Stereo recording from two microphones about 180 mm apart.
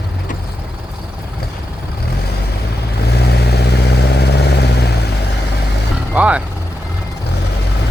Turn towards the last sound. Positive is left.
turn(degrees=-5)  # may be behind; listen again after turning